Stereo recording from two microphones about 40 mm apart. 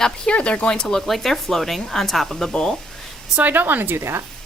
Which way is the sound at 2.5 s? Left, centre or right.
Centre.